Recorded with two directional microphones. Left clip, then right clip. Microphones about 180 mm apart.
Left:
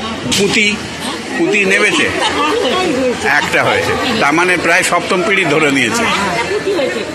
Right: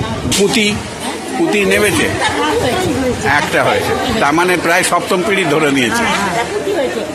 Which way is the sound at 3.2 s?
Centre (ahead or behind).